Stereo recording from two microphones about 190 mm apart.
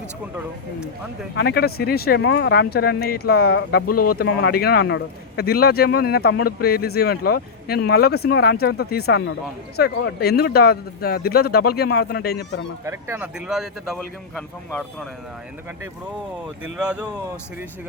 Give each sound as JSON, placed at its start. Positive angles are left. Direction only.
{"t": 1.4, "sound": "speech", "side_deg": 55}
{"t": 12.8, "sound": "speech", "side_deg": -15}
{"t": 16.7, "sound": "speech", "side_deg": -5}